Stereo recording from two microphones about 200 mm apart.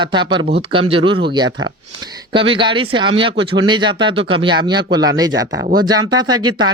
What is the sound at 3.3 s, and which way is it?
Speech, 60° right (ahead or behind).